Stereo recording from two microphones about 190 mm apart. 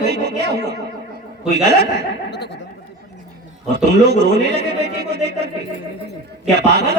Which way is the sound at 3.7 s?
60° right (ahead or behind).